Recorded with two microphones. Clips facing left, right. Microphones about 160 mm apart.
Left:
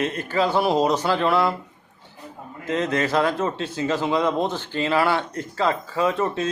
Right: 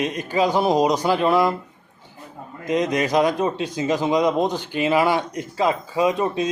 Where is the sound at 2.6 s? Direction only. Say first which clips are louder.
Right 2 dB; 15° right (ahead or behind).